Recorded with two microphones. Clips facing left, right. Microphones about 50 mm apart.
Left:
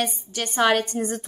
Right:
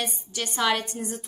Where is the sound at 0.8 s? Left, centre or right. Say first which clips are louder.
Left 7 dB; left.